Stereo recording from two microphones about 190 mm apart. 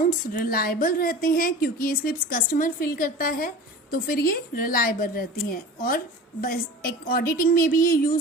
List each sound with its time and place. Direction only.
0.0 s a woman's voice: 45° left (ahead or behind)